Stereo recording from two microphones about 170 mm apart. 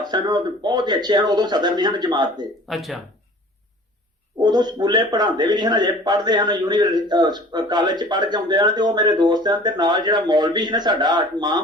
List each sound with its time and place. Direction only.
0.0 s a man's voice: 25° right (ahead or behind)
2.6 s speech: centre (ahead or behind)
4.4 s a man's voice: 25° right (ahead or behind)